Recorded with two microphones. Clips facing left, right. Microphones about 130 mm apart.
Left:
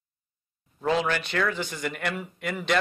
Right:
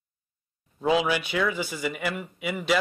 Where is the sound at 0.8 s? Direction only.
10° right (ahead or behind).